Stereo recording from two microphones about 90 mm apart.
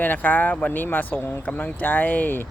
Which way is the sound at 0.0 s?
20° left (ahead or behind).